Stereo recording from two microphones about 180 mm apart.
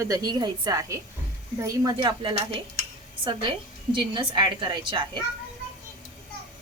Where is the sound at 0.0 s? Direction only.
20° right (ahead or behind).